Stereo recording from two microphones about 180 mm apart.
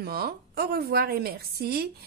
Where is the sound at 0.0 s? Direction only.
60° right (ahead or behind).